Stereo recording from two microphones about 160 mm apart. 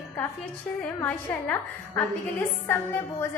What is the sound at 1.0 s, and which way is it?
A woman's voice, 10° left (ahead or behind).